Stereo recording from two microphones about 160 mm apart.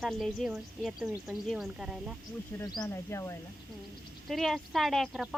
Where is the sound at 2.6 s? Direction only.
25° left (ahead or behind).